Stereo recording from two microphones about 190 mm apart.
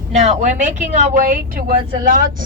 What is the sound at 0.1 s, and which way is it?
A woman's voice, 35° right (ahead or behind).